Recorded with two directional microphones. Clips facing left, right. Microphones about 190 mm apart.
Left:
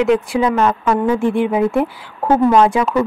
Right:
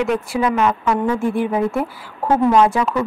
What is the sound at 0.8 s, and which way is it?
A woman's voice, 15° left (ahead or behind).